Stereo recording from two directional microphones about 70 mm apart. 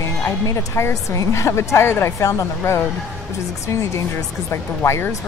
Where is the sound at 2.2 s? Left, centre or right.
Left.